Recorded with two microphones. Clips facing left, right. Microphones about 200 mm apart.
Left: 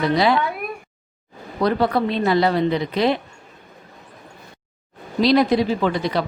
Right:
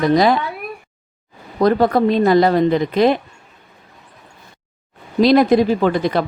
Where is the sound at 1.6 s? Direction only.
45° right (ahead or behind).